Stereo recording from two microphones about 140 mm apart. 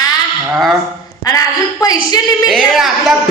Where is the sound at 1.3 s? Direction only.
25° left (ahead or behind).